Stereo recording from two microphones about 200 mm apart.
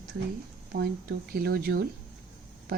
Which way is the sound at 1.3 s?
50° right (ahead or behind).